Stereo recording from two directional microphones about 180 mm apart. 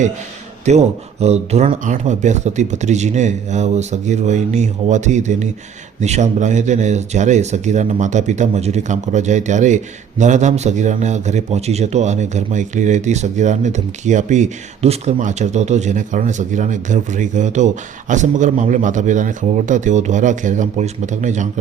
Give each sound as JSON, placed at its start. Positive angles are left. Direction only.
{"t": 0.6, "sound": "a man's voice", "side_deg": -40}